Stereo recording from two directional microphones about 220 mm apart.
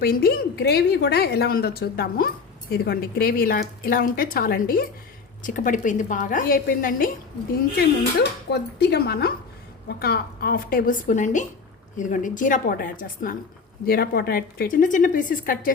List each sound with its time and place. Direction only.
0.0 s a woman's voice: 45° left (ahead or behind)